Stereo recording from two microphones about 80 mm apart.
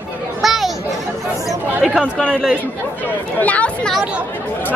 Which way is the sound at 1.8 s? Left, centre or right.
Centre.